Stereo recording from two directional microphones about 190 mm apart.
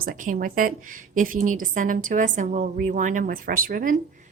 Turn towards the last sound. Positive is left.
turn(degrees=-45)  # may be behind; listen again after turning